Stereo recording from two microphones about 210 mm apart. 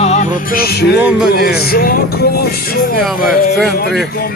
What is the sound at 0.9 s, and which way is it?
Speech, 5° right (ahead or behind).